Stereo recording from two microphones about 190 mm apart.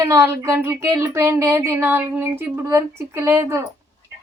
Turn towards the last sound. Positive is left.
turn(degrees=-15)  # may be behind; listen again after turning